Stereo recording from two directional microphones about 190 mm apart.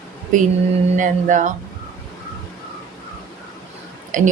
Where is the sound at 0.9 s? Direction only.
40° right (ahead or behind).